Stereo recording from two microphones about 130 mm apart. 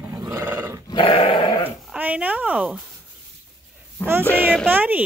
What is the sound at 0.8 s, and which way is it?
Dog, 40° left (ahead or behind).